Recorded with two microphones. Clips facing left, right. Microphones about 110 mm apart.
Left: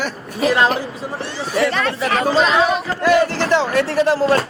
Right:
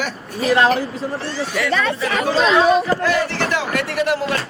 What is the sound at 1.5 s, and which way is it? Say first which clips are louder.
Speech: left 3 dB; 35° left (ahead or behind).